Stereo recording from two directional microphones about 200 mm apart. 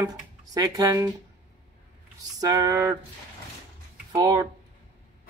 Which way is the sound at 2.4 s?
20° right (ahead or behind).